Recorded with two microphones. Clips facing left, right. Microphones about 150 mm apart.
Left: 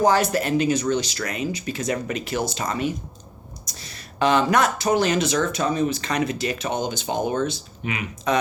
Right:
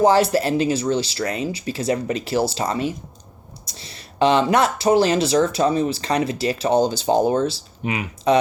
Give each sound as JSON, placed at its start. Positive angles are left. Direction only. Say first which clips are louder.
{"t": 0.0, "sound": "speech", "louder": "right 3 dB", "side_deg": -30}